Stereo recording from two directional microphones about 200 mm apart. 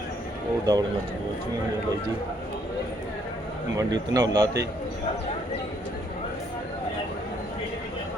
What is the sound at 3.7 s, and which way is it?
Speech, 20° right (ahead or behind).